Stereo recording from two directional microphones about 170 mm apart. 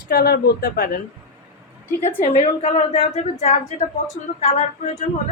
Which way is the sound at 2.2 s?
35° left (ahead or behind).